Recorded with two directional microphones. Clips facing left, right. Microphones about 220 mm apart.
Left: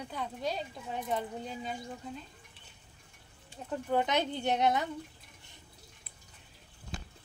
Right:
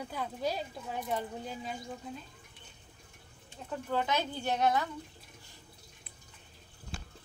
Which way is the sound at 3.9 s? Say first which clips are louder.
Left 3 dB; 20° left (ahead or behind).